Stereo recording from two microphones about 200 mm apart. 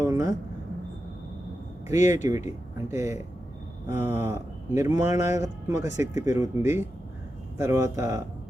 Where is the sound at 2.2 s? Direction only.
15° right (ahead or behind).